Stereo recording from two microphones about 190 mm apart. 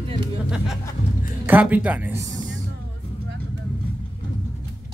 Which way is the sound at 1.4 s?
10° right (ahead or behind).